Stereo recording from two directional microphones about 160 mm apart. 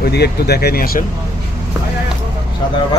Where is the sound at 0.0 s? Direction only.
85° left; by 1.0 s 65° left (ahead or behind).